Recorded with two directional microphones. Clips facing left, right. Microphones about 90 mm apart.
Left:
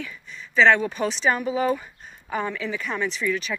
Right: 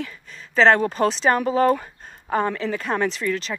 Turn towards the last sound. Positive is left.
turn(degrees=-55)  # may be behind; listen again after turning